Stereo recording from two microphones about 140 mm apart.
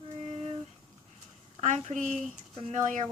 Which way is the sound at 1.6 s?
55° right (ahead or behind).